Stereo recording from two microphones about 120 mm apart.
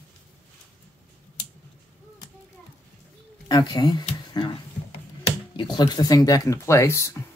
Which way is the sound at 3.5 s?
35° left (ahead or behind).